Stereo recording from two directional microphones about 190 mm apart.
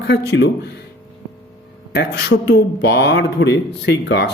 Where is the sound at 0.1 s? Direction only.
65° left (ahead or behind).